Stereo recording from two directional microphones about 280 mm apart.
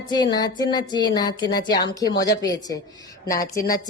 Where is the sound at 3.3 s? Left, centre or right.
Left.